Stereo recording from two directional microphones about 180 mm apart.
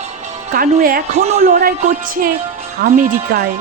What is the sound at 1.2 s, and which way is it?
Speech, 35° right (ahead or behind).